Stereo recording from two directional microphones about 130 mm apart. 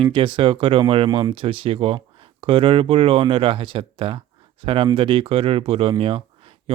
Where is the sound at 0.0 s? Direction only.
40° right (ahead or behind).